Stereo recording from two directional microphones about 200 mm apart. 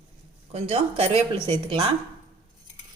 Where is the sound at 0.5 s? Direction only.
30° right (ahead or behind).